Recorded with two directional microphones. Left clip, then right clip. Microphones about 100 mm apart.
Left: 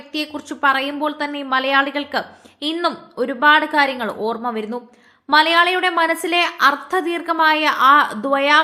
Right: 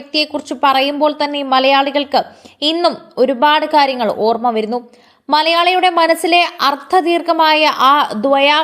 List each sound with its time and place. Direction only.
0.1 s a woman's voice: 20° right (ahead or behind)
0.6 s a woman's voice: 35° right (ahead or behind)